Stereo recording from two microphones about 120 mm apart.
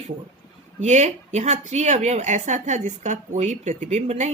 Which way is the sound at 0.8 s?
75° right (ahead or behind).